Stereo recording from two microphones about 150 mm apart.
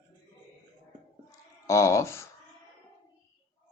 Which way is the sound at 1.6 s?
20° left (ahead or behind).